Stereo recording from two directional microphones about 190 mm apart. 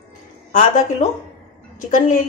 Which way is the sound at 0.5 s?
40° left (ahead or behind).